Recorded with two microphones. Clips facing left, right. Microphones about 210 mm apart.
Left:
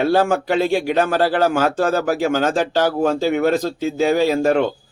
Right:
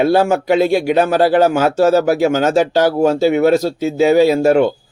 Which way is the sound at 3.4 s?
40° right (ahead or behind).